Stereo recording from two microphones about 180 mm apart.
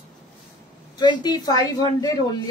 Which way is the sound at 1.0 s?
25° left (ahead or behind).